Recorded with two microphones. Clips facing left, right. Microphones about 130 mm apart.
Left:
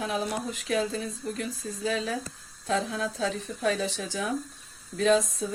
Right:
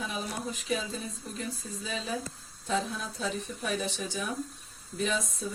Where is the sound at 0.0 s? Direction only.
90° left.